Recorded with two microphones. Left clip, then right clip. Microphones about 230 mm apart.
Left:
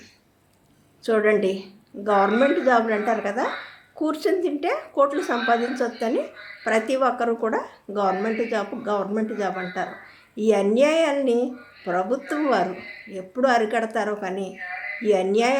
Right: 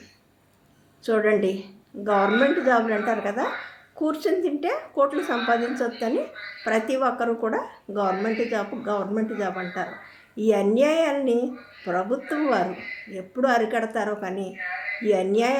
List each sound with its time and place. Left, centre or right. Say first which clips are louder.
1.0 s a woman's voice: left 1 dB; centre